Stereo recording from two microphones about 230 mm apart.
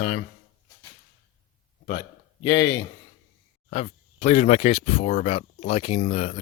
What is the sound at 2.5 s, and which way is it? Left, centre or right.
Speech, left.